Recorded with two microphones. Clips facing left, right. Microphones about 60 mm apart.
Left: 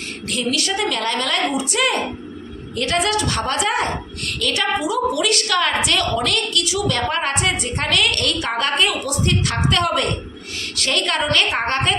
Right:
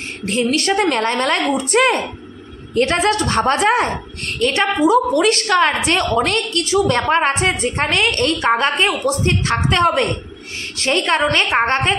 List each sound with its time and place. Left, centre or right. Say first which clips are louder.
0.3 s a woman's voice: right 5 dB; right